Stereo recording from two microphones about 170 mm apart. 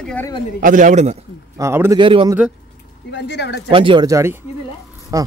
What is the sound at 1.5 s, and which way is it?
Speech, 15° right (ahead or behind).